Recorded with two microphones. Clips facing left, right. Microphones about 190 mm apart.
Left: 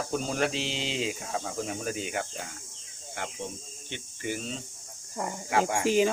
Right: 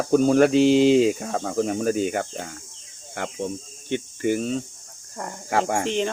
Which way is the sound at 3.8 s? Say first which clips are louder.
Right 12 dB; 50° right (ahead or behind).